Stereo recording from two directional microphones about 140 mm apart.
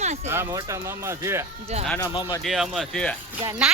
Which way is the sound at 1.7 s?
50° right (ahead or behind).